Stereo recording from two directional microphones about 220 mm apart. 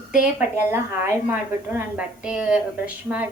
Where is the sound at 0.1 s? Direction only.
5° right (ahead or behind).